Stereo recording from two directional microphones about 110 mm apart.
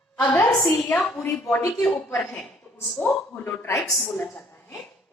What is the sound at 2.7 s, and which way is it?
A woman's voice, 20° left (ahead or behind).